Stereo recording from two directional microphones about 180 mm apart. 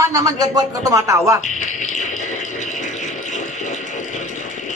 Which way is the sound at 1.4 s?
45° left (ahead or behind).